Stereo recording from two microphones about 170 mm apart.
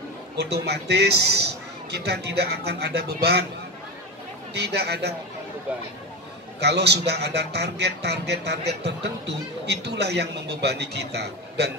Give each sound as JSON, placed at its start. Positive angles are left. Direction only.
{"t": 0.4, "sound": "speech", "side_deg": -75}
{"t": 4.6, "sound": "speech", "side_deg": -75}
{"t": 5.7, "sound": "speech", "side_deg": -10}
{"t": 6.6, "sound": "speech", "side_deg": -80}